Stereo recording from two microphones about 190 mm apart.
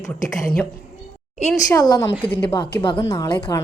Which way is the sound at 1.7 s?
15° left (ahead or behind).